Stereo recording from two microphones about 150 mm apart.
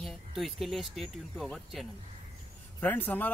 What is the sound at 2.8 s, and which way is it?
Speech, 10° left (ahead or behind).